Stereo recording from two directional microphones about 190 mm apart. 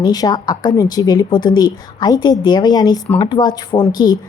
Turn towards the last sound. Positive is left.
turn(degrees=20)  # may be behind; listen again after turning